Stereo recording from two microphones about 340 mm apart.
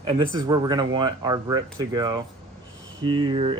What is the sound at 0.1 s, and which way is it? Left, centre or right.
Speech, centre.